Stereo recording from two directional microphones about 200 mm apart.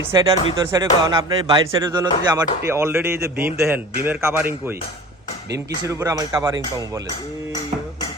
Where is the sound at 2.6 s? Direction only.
10° right (ahead or behind).